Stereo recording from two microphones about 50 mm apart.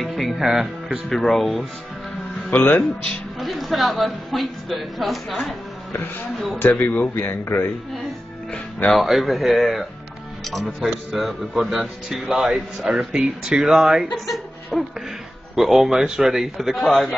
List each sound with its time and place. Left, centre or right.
0.0 s speech: centre
1.0 s a man's voice: centre
2.5 s speech: left
3.3 s a man's voice: centre
6.7 s speech: left
7.2 s speech: left
8.9 s a man's voice: centre
14.1 s a man's voice: centre
16.7 s a man's voice: centre